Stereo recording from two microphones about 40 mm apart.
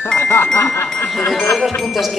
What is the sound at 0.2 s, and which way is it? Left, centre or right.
Music, left.